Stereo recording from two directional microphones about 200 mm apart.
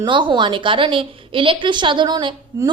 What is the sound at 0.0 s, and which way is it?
A woman's voice, 25° right (ahead or behind).